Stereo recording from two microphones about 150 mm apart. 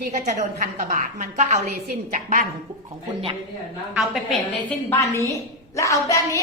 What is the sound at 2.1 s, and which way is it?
Speech, 65° right (ahead or behind).